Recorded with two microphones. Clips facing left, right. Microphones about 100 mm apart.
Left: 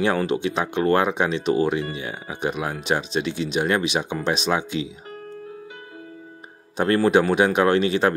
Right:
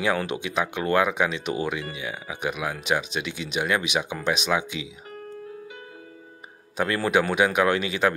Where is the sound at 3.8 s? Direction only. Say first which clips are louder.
Left 3 dB; 15° right (ahead or behind).